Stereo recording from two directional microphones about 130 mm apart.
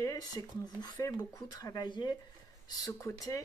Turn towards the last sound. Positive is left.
turn(degrees=25)  # may be behind; listen again after turning